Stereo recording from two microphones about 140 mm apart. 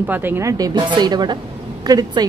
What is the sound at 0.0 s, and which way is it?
A woman's voice, 15° right (ahead or behind).